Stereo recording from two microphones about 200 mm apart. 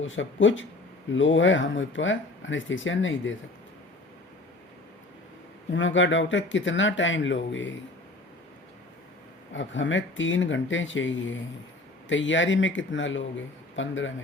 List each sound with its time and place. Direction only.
0.0 s speech: 70° left (ahead or behind)
5.7 s speech: 70° left (ahead or behind)
9.5 s speech: 65° left (ahead or behind)